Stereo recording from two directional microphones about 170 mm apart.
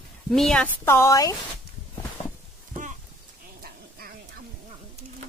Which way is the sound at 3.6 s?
60° right (ahead or behind).